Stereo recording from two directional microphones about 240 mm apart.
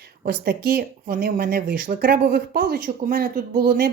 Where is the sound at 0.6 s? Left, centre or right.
Right.